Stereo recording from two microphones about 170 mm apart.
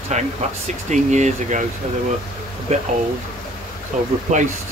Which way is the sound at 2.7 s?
40° right (ahead or behind).